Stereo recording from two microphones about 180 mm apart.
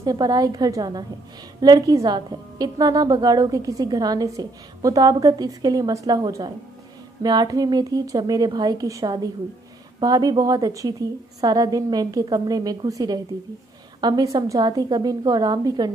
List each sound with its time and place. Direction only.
0.0 s a woman's voice: 20° right (ahead or behind)